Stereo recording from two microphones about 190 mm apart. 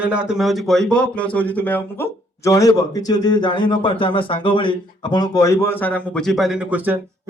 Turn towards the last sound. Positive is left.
turn(degrees=-5)  # may be behind; listen again after turning